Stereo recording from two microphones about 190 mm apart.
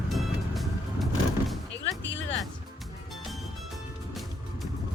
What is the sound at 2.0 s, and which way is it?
Music, 75° left (ahead or behind).